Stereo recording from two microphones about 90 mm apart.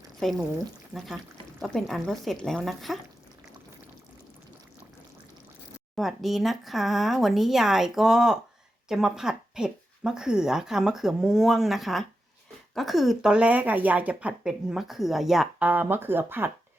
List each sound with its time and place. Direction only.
0.2 s speech: centre (ahead or behind)
6.0 s speech: centre (ahead or behind)
13.3 s speech: 15° right (ahead or behind)
15.5 s speech: 15° right (ahead or behind)